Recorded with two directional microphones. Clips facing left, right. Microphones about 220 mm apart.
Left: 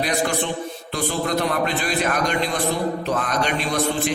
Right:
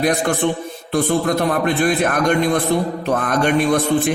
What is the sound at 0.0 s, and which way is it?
A man's voice, 55° right (ahead or behind).